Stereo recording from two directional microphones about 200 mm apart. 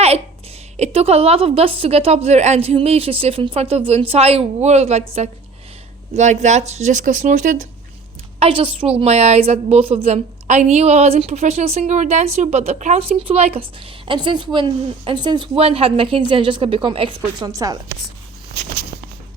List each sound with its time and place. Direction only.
0.8 s a woman's voice: 30° right (ahead or behind)
6.1 s speech: 35° right (ahead or behind)
8.4 s a woman's voice: 25° right (ahead or behind)